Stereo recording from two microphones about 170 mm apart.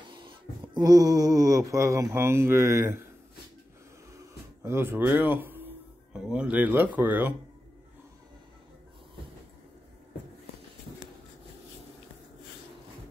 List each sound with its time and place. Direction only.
0.1 s music: 30° right (ahead or behind)
4.6 s speech: 15° right (ahead or behind)